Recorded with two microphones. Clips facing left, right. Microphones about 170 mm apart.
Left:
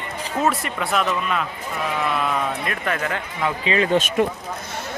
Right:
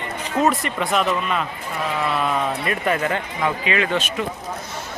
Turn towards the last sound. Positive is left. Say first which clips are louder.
# left 3 dB
turn(degrees=35)  # may be behind; listen again after turning